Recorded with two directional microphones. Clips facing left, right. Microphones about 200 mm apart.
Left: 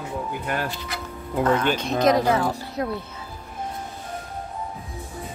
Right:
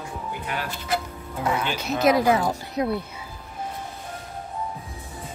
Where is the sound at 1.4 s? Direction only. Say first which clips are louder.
Left 5 dB; 10° right (ahead or behind).